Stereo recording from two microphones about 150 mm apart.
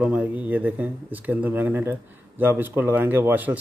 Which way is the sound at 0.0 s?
10° right (ahead or behind).